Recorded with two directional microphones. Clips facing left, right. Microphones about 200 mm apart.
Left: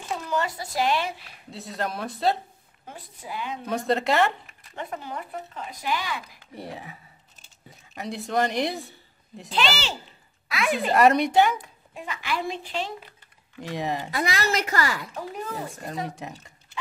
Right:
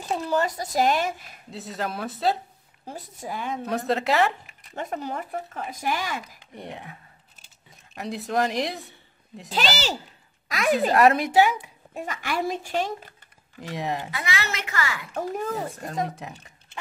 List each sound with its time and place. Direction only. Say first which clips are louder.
0.1 s speech: right 3 dB; 40° right (ahead or behind)
1.5 s speech: even; centre (ahead or behind)
2.8 s speech: right 5 dB; 40° right (ahead or behind)
3.6 s speech: left 1 dB; centre (ahead or behind)
4.7 s speech: right 3 dB; 40° right (ahead or behind)
6.5 s speech: left 1 dB; 5° left (ahead or behind)
9.5 s speech: right 1 dB; 40° right (ahead or behind)
10.9 s speech: left 3 dB; centre (ahead or behind)
11.9 s speech: right 1 dB; 45° right (ahead or behind)
13.6 s speech: left 1 dB; centre (ahead or behind)
14.1 s a woman's voice: left 5 dB; 40° left (ahead or behind)
15.1 s speech: right 5 dB; 45° right (ahead or behind)
15.6 s speech: right 3 dB; centre (ahead or behind)